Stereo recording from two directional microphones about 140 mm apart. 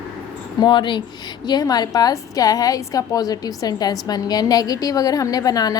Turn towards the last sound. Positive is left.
turn(degrees=25)  # may be behind; listen again after turning